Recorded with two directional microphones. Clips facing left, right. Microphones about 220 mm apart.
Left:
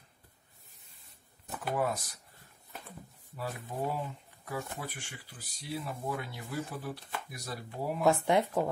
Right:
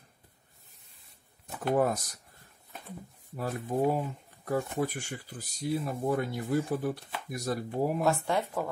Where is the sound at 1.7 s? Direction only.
45° right (ahead or behind).